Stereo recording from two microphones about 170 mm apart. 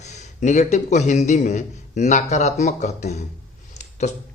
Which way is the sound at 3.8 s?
45° left (ahead or behind).